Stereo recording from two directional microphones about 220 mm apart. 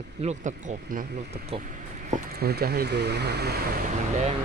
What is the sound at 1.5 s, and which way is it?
Speech, 35° right (ahead or behind).